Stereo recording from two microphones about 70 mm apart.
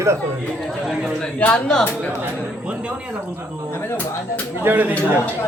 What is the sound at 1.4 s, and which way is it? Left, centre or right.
Speech, centre.